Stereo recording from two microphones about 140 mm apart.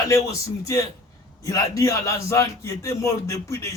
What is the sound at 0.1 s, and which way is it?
A man's voice, 25° left (ahead or behind).